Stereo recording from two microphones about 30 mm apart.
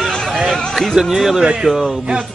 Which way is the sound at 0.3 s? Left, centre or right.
Right.